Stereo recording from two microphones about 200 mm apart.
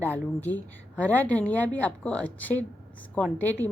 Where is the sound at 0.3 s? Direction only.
10° left (ahead or behind).